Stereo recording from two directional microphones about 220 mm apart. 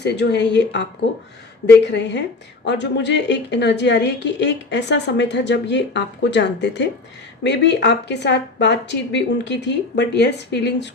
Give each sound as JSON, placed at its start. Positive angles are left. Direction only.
{"t": 0.0, "sound": "a woman's voice", "side_deg": 50}